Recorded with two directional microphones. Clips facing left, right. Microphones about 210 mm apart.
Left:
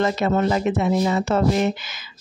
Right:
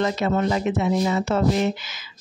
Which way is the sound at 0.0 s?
50° left (ahead or behind).